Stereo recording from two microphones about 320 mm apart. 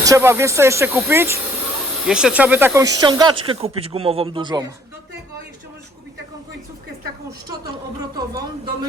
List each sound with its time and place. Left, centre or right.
0.0 s speech: centre